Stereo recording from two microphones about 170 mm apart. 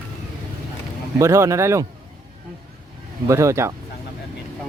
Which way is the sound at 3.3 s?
15° right (ahead or behind).